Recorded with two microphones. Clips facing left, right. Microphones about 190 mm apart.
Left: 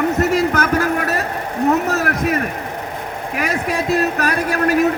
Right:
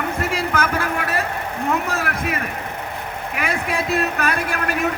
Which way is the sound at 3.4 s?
40° left (ahead or behind).